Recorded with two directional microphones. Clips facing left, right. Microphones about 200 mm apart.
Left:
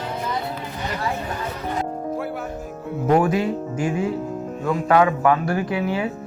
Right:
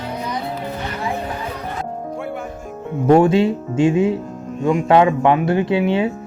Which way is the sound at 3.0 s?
25° right (ahead or behind).